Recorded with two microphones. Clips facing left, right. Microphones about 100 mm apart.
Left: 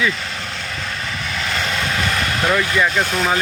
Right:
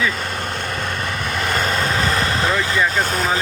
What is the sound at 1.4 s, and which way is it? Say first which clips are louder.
Vehicle: right 3 dB; 45° right (ahead or behind).